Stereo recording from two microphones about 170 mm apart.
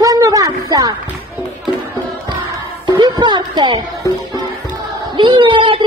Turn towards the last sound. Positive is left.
turn(degrees=-30)  # may be behind; listen again after turning